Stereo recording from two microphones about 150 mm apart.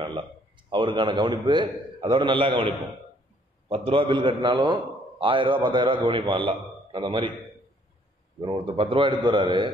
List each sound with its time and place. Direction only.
0.0 s a man's voice: 35° right (ahead or behind)
8.4 s a man's voice: 35° right (ahead or behind)